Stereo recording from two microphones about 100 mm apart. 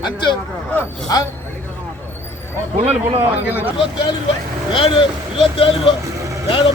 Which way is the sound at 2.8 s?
80° right.